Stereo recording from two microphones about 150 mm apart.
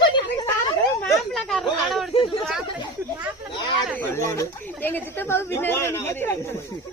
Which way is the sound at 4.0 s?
15° left (ahead or behind).